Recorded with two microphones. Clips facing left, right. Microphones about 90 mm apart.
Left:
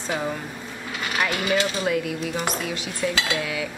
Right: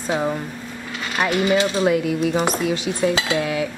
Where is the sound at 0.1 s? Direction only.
15° right (ahead or behind).